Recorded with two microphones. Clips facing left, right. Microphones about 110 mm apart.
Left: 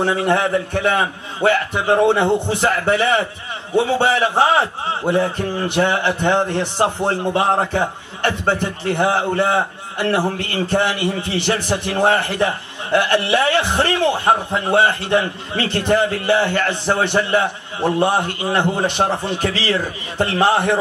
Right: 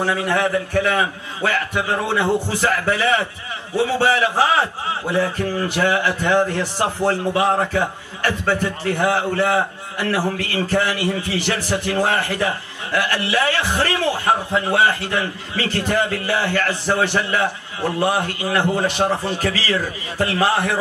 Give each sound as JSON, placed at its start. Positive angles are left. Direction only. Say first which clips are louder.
{"t": 0.0, "sound": "a man's voice", "louder": "left 2 dB", "side_deg": 30}